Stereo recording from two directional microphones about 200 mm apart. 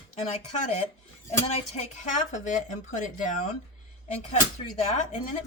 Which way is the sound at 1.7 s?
35° left (ahead or behind).